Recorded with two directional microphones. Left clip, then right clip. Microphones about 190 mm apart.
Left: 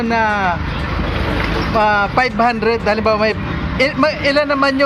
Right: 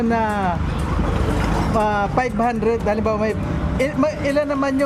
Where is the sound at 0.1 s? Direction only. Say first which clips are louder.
Left 8 dB; 15° right (ahead or behind).